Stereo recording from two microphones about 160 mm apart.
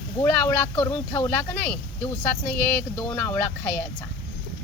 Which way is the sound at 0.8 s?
20° left (ahead or behind).